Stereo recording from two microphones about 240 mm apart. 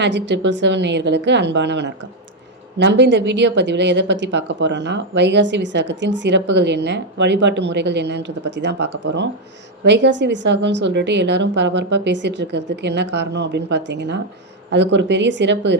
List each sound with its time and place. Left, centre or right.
0.0 s a woman's voice: right
9.8 s a woman's voice: right